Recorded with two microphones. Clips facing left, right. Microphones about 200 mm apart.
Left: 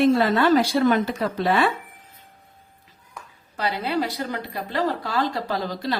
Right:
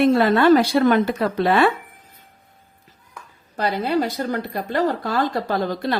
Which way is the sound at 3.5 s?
45° right (ahead or behind).